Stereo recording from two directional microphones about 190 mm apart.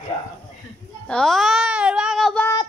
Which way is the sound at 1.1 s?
5° left (ahead or behind).